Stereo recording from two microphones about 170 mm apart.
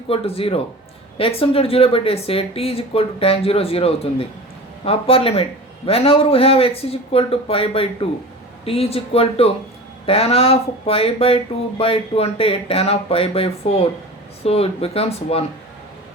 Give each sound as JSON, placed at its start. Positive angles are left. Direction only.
{"t": 0.1, "sound": "speech", "side_deg": 35}